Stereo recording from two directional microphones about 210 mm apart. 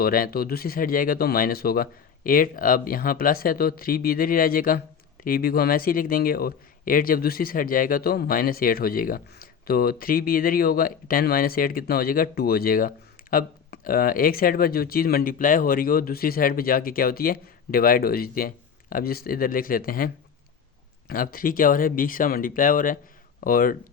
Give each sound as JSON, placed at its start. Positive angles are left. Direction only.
{"t": 0.0, "sound": "a man's voice", "side_deg": 45}
{"t": 21.1, "sound": "a man's voice", "side_deg": 45}